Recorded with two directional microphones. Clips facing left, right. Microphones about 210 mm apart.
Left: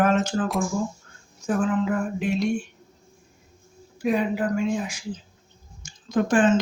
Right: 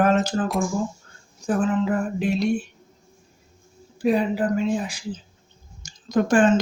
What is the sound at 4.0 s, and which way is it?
Speech, 30° right (ahead or behind).